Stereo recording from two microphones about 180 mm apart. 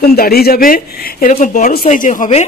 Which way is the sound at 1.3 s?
40° left (ahead or behind).